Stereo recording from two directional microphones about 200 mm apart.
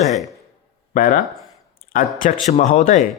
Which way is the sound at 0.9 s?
45° left (ahead or behind).